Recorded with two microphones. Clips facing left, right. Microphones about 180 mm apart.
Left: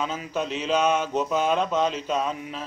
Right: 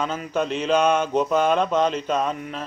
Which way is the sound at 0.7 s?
5° left (ahead or behind).